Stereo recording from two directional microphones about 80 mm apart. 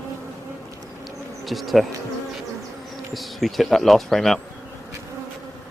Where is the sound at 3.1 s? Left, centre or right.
Centre.